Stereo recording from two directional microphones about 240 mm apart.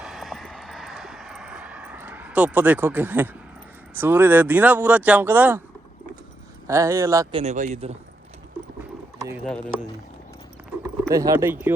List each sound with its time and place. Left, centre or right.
0.0 s vehicle: centre
3.9 s speech: centre
6.7 s speech: centre
7.3 s speech: right
9.4 s speech: centre
11.1 s speech: centre